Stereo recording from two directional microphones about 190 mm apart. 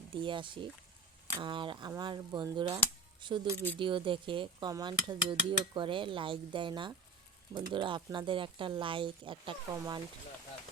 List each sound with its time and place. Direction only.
0.1 s dishes: 25° right (ahead or behind)